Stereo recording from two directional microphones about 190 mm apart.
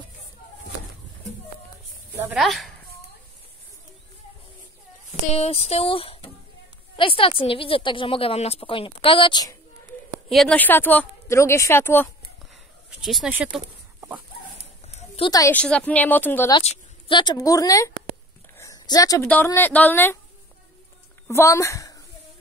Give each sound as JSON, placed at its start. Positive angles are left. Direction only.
{"t": 2.3, "sound": "speech", "side_deg": 0}
{"t": 5.3, "sound": "a sound", "side_deg": 35}
{"t": 7.0, "sound": "a woman's voice", "side_deg": 30}
{"t": 10.3, "sound": "speech", "side_deg": 5}
{"t": 13.0, "sound": "speech", "side_deg": 0}
{"t": 14.9, "sound": "a sound", "side_deg": 30}
{"t": 15.3, "sound": "speech", "side_deg": 15}
{"t": 16.5, "sound": "speech", "side_deg": 25}
{"t": 18.6, "sound": "a sound", "side_deg": 20}
{"t": 19.2, "sound": "speech", "side_deg": 10}
{"t": 21.3, "sound": "speech", "side_deg": 15}